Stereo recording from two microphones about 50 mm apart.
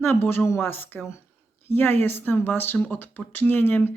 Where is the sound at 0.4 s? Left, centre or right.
Left.